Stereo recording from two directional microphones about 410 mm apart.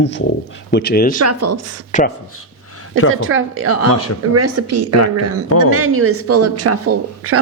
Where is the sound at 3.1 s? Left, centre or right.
Right.